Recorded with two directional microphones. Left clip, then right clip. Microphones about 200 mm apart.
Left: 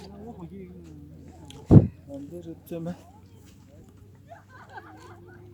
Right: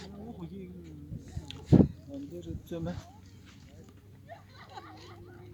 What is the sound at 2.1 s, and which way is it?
Speech, 35° left (ahead or behind).